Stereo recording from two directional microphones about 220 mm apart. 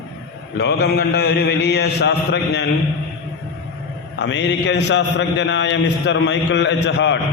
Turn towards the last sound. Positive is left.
turn(degrees=55)  # may be behind; listen again after turning